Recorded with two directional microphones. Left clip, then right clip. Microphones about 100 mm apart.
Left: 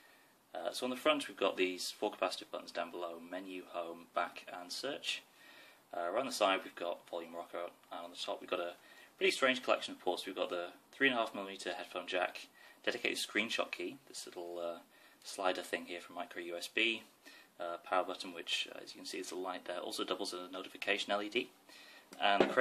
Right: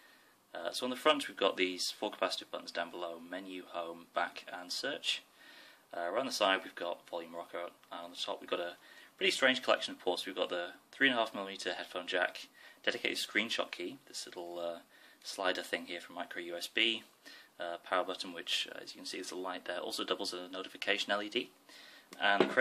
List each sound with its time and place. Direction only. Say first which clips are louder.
0.5 s speech: right 1 dB; 35° right (ahead or behind)